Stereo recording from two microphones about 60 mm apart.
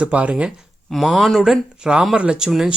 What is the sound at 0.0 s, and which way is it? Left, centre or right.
Speech, right.